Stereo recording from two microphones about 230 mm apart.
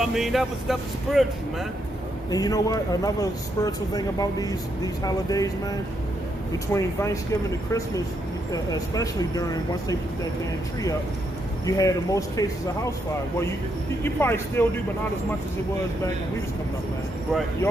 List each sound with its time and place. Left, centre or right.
0.0 s speech: centre
2.3 s speech: centre
6.7 s speech: centre
11.6 s speech: centre
14.0 s speech: centre